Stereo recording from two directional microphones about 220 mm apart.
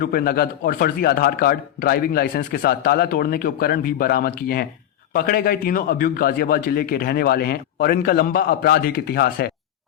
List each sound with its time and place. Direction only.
0.0 s a man's voice: 40° left (ahead or behind)